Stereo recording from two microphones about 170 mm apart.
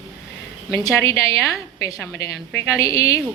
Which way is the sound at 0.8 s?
20° left (ahead or behind).